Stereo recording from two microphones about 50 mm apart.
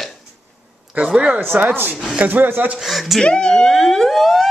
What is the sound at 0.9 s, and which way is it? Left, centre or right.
Speech, right.